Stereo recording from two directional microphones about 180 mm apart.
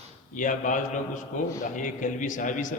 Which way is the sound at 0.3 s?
45° left (ahead or behind).